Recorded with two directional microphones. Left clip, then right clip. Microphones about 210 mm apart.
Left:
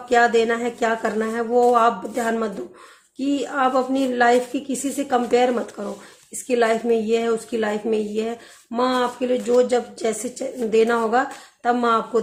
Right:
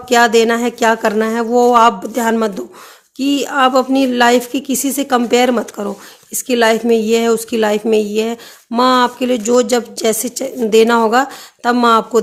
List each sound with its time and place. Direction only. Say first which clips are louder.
0.1 s a woman's voice: right 6 dB; 45° right (ahead or behind)